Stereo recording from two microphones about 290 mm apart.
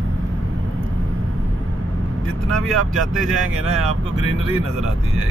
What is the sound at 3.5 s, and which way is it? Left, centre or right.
Speech, right.